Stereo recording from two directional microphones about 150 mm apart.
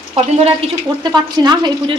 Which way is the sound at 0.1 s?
40° right (ahead or behind).